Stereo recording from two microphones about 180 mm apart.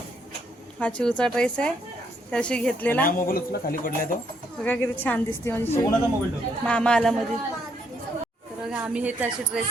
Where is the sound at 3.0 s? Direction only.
50° left (ahead or behind).